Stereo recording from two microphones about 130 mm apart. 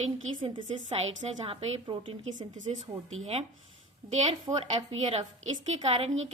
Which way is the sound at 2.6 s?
65° right (ahead or behind).